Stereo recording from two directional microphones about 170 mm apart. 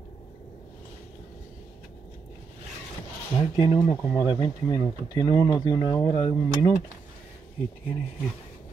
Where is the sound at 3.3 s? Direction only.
25° left (ahead or behind).